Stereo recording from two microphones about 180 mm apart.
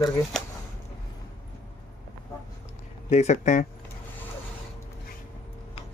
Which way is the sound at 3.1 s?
40° left (ahead or behind).